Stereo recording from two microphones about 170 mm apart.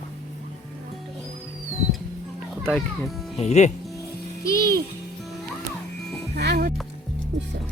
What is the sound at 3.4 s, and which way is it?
Speech, 40° left (ahead or behind).